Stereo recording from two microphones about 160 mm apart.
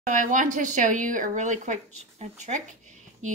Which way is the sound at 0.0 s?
55° right (ahead or behind).